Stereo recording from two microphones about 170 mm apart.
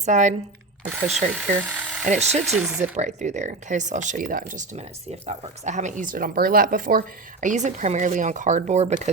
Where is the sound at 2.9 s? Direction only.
45° right (ahead or behind).